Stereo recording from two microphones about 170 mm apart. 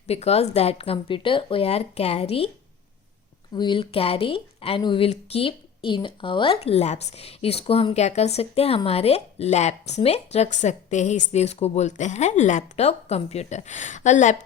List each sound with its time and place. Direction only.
0.1 s speech: 40° left (ahead or behind)
3.5 s speech: 25° left (ahead or behind); by 14.3 s 45° left (ahead or behind)